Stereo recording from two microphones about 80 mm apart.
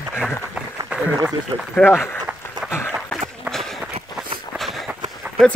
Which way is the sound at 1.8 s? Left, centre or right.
Left.